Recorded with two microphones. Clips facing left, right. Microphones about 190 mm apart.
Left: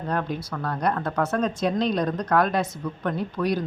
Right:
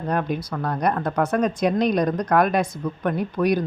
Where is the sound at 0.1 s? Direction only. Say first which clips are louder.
Right 3 dB; 15° right (ahead or behind).